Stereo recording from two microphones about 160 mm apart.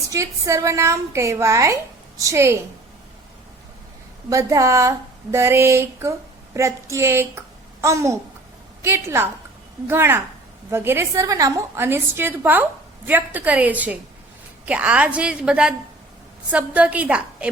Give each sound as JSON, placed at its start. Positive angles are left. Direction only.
{"t": 0.1, "sound": "a woman's voice", "side_deg": -20}
{"t": 4.3, "sound": "a woman's voice", "side_deg": -20}